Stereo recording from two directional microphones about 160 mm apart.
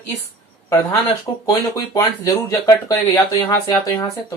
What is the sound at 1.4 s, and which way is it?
Speech, 20° left (ahead or behind).